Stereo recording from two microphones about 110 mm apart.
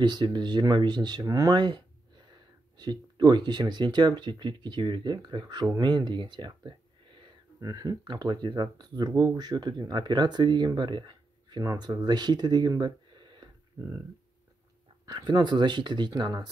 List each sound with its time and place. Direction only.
0.0 s speech: 40° right (ahead or behind)
7.6 s speech: 35° right (ahead or behind)
11.6 s speech: 35° right (ahead or behind)
15.0 s speech: 40° right (ahead or behind)